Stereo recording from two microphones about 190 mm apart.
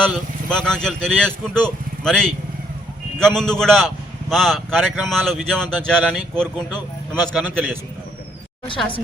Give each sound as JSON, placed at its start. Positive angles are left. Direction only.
{"t": 0.0, "sound": "a man's voice", "side_deg": 5}
{"t": 8.7, "sound": "a woman's voice", "side_deg": 25}